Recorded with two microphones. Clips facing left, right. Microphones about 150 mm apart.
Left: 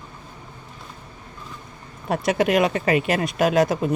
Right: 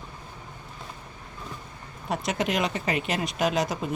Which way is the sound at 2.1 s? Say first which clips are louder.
Left 7 dB; 60° left (ahead or behind).